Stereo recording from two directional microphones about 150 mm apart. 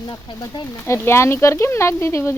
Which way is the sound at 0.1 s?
30° left (ahead or behind).